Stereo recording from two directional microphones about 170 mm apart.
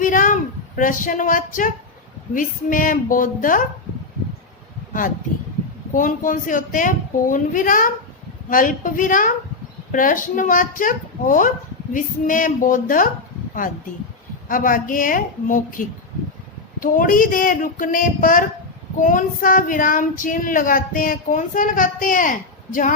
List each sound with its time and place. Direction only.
0.0 s a sound: 50° left (ahead or behind)
0.8 s child singing: 50° left (ahead or behind)
5.9 s child singing: 50° left (ahead or behind)
14.4 s child singing: 55° left (ahead or behind)